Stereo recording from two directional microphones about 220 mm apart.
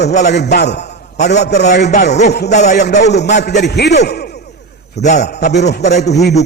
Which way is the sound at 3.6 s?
50° left (ahead or behind).